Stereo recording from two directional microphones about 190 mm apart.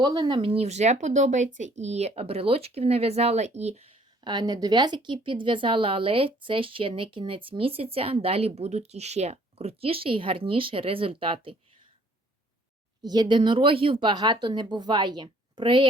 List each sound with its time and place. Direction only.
0.0 s speech: 25° right (ahead or behind)
13.1 s speech: 25° right (ahead or behind)